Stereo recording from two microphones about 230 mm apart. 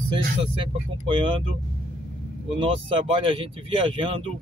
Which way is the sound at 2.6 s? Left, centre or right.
Right.